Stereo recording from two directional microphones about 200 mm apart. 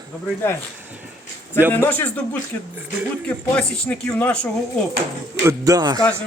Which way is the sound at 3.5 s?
5° left (ahead or behind).